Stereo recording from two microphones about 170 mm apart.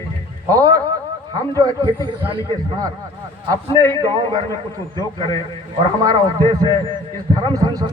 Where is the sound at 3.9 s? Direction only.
25° right (ahead or behind).